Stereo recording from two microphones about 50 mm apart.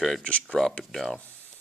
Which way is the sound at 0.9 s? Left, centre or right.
Centre.